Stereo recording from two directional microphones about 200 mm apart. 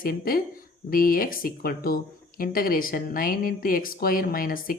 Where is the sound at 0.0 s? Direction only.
45° left (ahead or behind).